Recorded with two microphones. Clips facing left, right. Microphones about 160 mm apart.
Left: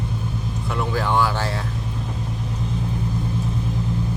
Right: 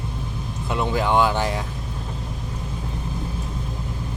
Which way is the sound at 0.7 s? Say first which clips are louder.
Right 2 dB; 20° right (ahead or behind).